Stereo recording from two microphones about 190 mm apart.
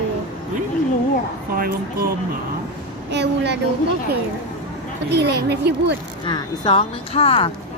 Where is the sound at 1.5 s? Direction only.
50° right (ahead or behind).